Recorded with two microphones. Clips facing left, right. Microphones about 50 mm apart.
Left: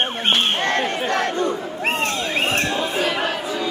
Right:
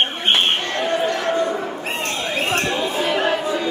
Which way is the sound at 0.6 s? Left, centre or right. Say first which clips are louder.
Even; left.